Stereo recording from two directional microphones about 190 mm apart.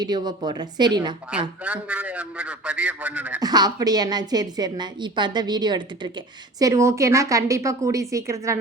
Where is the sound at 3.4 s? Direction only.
20° right (ahead or behind).